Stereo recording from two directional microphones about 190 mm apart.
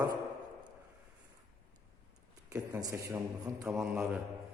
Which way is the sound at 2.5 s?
20° right (ahead or behind).